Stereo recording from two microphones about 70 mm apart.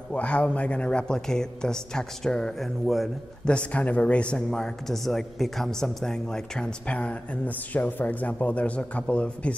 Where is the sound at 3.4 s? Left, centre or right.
Centre.